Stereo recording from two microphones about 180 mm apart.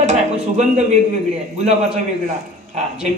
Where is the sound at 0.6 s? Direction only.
40° right (ahead or behind).